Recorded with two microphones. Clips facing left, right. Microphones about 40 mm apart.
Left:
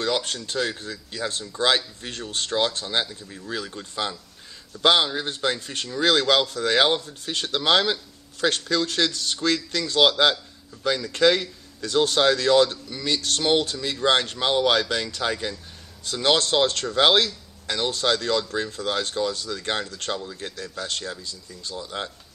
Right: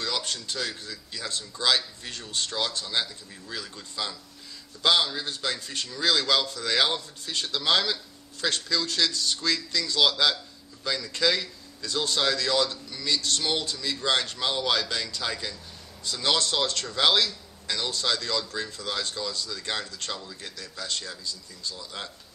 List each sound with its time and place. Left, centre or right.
0.0 s a man's voice: left
16.2 s speech: left
21.7 s speech: left